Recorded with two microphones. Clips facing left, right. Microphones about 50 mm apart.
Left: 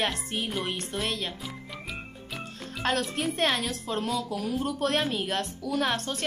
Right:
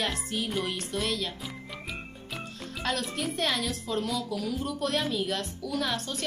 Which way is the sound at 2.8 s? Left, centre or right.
Left.